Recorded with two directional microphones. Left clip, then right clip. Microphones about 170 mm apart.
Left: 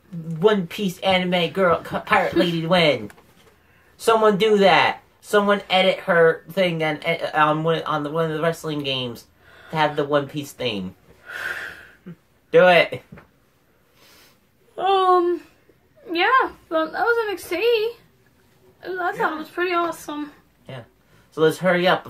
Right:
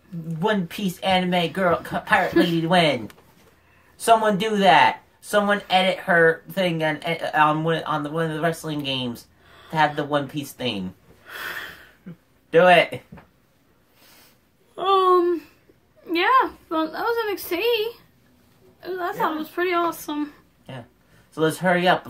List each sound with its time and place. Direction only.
0.3 s speech: centre (ahead or behind)
4.0 s speech: centre (ahead or behind)
11.2 s snort: 20° right (ahead or behind)
12.4 s speech: centre (ahead or behind)
14.8 s a woman's voice: 20° right (ahead or behind)
21.4 s speech: centre (ahead or behind)